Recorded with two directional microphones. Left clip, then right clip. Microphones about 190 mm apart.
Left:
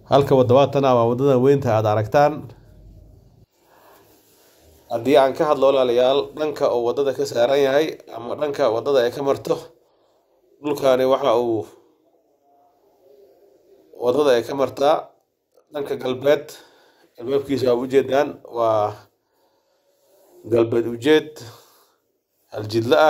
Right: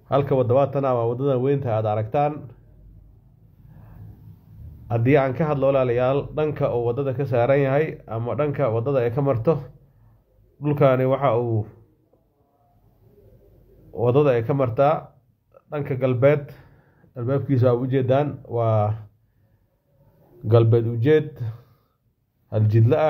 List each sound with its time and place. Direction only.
0.1 s speech: 20° left (ahead or behind)
4.8 s speech: 25° left (ahead or behind)
14.0 s speech: 25° left (ahead or behind)
20.4 s a man's voice: 15° left (ahead or behind)